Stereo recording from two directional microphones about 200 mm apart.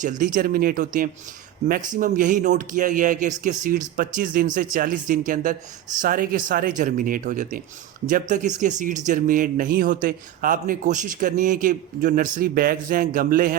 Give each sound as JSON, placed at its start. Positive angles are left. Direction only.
{"t": 0.0, "sound": "speech", "side_deg": -40}